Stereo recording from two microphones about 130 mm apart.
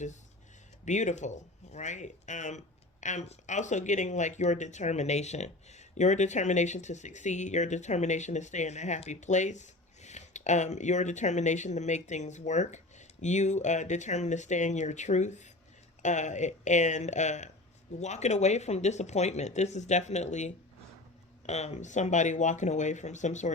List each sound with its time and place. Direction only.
0.9 s speech: 65° left (ahead or behind)